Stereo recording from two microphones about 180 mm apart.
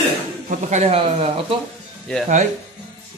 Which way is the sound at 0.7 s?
35° right (ahead or behind).